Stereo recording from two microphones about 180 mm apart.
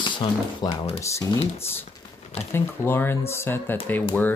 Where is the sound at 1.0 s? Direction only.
15° left (ahead or behind).